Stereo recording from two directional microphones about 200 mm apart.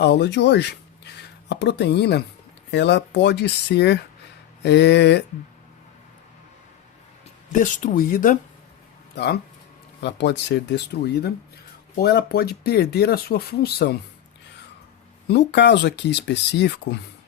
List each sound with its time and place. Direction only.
0.0 s speech: 60° left (ahead or behind)
7.5 s speech: 40° left (ahead or behind)
9.1 s speech: 55° left (ahead or behind)
15.3 s speech: 60° left (ahead or behind)